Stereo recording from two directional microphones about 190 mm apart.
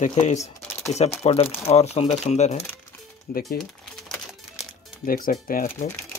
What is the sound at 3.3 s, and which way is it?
Speech, 50° left (ahead or behind).